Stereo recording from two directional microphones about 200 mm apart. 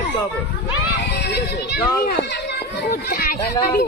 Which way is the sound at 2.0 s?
55° left (ahead or behind).